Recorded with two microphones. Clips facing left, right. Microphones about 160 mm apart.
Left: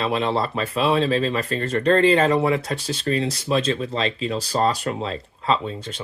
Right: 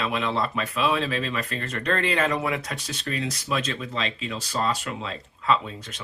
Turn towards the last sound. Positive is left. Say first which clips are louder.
# left 2 dB
turn(degrees=30)  # may be behind; listen again after turning